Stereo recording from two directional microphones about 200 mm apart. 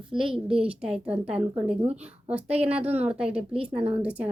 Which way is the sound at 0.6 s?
5° right (ahead or behind).